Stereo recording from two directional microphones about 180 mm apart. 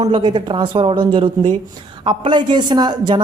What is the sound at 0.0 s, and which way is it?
Speech, 25° right (ahead or behind).